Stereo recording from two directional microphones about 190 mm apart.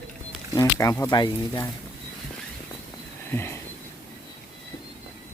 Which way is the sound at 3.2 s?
10° left (ahead or behind).